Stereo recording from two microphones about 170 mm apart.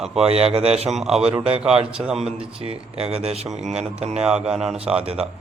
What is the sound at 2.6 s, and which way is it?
Speech, 35° right (ahead or behind).